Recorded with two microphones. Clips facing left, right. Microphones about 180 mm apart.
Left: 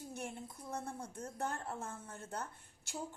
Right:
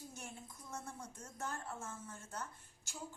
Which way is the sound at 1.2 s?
60° left (ahead or behind).